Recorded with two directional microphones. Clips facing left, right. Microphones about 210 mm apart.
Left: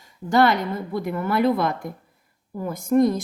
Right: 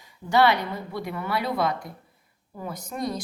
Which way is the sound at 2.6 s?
50° left (ahead or behind).